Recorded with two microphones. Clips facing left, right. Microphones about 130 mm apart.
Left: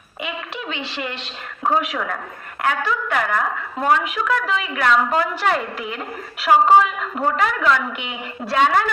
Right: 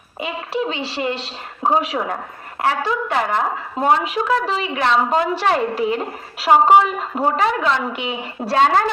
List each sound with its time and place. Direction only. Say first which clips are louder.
0.2 s a woman's voice: right 6 dB; 35° right (ahead or behind)